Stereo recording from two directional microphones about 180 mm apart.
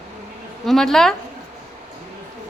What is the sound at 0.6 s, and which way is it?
Speech, centre (ahead or behind).